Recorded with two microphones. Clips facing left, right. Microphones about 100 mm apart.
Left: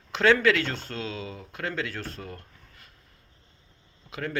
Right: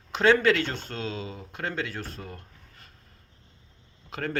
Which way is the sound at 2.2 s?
35° right (ahead or behind).